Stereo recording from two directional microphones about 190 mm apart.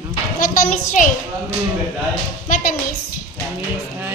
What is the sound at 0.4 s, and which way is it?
Speech, 45° left (ahead or behind).